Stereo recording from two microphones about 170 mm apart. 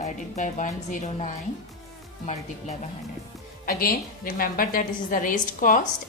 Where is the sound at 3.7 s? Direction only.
60° left (ahead or behind).